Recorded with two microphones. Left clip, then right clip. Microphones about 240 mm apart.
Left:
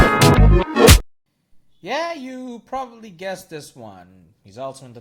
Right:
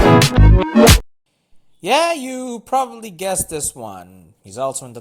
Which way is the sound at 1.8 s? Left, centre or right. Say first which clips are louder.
Right 9 dB; right.